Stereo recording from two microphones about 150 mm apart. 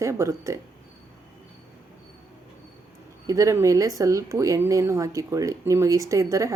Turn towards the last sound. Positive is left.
turn(degrees=-20)  # may be behind; listen again after turning